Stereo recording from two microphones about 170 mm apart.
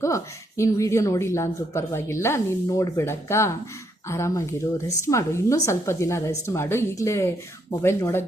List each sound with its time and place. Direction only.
0.0 s speech: 20° left (ahead or behind)